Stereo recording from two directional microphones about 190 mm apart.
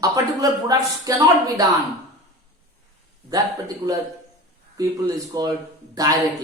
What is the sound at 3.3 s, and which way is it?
Speech, 20° right (ahead or behind).